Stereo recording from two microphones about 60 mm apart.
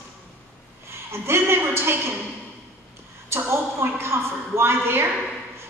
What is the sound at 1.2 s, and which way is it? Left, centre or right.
Speech, right.